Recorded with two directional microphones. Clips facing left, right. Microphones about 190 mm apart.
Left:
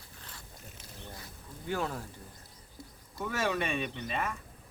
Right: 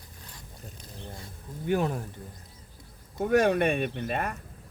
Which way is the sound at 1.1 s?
20° right (ahead or behind).